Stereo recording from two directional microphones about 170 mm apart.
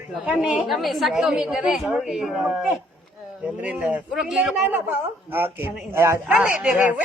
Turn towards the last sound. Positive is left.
turn(degrees=-5)  # may be behind; listen again after turning